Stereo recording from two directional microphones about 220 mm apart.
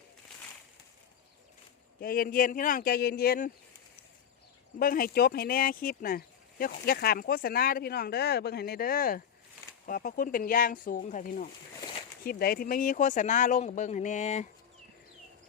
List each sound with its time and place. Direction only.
2.0 s speech: 40° left (ahead or behind)
4.8 s speech: 40° left (ahead or behind)
11.8 s a sound: 20° left (ahead or behind)
12.2 s speech: 45° left (ahead or behind)